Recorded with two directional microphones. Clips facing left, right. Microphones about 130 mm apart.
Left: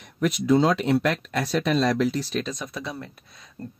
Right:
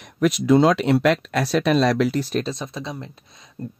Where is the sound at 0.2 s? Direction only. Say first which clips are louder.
Right 4 dB; 90° right; by 2.4 s 55° right (ahead or behind).